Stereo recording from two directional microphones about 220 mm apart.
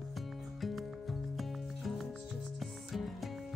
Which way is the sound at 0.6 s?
Centre (ahead or behind).